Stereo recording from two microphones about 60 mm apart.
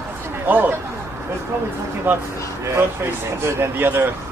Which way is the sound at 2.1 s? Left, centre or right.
Right.